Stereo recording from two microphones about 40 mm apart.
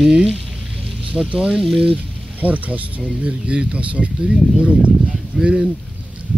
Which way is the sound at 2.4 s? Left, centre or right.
Right.